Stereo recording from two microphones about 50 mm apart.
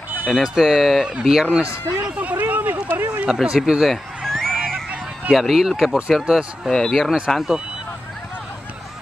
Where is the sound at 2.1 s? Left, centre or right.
Right.